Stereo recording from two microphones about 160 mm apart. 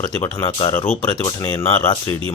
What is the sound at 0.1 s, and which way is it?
Speech, 20° left (ahead or behind).